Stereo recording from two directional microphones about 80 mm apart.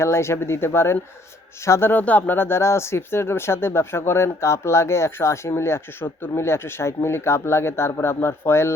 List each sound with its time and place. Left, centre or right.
0.0 s speech: left
1.9 s speech: left